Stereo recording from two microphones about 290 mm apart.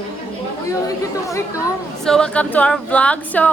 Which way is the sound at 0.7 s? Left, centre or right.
Centre.